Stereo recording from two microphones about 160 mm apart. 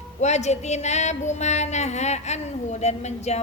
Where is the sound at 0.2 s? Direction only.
45° left (ahead or behind).